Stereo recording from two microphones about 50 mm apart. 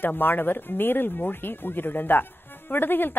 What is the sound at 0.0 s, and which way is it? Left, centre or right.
A woman's voice, left.